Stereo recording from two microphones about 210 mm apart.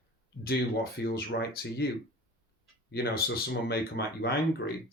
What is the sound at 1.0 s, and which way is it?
Speech, 50° left (ahead or behind).